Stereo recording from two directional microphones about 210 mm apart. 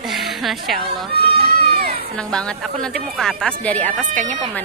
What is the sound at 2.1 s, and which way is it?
A woman's voice, 5° left (ahead or behind).